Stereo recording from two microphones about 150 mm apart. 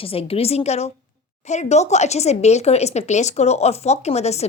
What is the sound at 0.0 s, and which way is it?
Speech, 40° left (ahead or behind).